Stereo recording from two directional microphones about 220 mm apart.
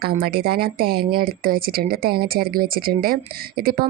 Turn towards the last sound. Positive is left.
turn(degrees=-45)  # may be behind; listen again after turning